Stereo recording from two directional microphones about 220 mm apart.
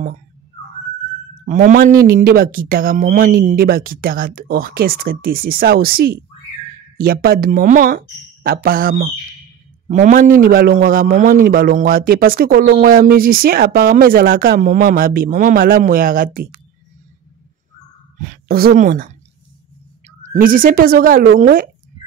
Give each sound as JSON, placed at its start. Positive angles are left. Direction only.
{"t": 1.4, "sound": "a man's voice", "side_deg": -35}
{"t": 18.1, "sound": "a woman's voice", "side_deg": -35}
{"t": 20.2, "sound": "a man's voice", "side_deg": -40}